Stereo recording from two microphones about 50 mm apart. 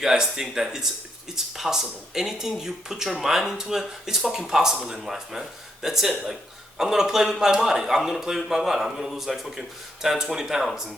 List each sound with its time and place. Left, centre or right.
0.0 s speech: centre